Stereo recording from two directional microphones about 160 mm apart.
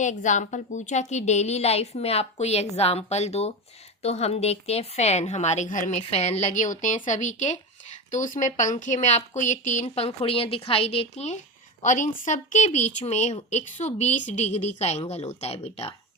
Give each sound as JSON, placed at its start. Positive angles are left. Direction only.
{"t": 0.0, "sound": "a woman's voice", "side_deg": 50}